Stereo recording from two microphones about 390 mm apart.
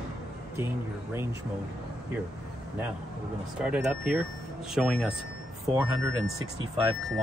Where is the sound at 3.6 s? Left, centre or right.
Centre.